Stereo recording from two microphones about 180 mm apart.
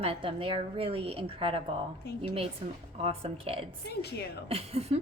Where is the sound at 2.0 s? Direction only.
65° left (ahead or behind).